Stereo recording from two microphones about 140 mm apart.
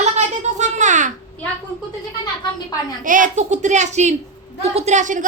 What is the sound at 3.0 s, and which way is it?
A woman's voice, 70° right (ahead or behind).